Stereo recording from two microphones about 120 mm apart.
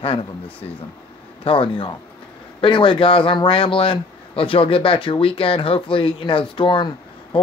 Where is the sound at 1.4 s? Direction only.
45° left (ahead or behind).